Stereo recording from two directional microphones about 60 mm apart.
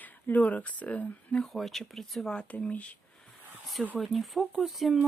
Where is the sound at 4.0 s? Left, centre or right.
Centre.